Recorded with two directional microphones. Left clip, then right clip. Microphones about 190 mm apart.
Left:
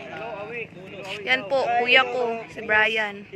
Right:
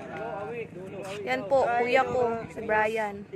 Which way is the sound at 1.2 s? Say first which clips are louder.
Left 3 dB; 5° right (ahead or behind).